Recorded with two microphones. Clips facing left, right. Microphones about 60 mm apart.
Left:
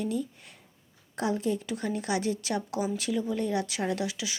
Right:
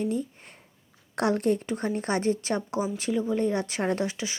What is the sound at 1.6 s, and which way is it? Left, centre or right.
Speech, right.